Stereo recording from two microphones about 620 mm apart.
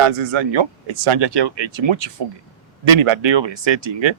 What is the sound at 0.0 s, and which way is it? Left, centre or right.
A man's voice, right.